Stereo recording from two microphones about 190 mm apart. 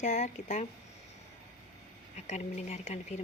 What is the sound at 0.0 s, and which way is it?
Speech, 40° left (ahead or behind).